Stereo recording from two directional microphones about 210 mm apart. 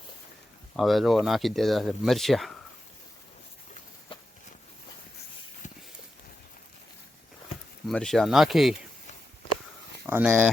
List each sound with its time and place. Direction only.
0.8 s speech: centre (ahead or behind)
5.6 s a sound: 35° left (ahead or behind)
7.9 s speech: centre (ahead or behind)
10.1 s speech: 10° right (ahead or behind)